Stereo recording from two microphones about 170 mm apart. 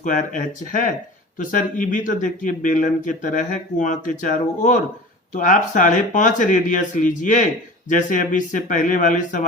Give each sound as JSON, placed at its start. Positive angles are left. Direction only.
{"t": 0.0, "sound": "speech", "side_deg": 50}